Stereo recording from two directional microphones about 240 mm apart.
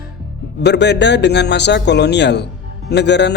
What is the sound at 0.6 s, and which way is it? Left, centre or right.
A man's voice, left.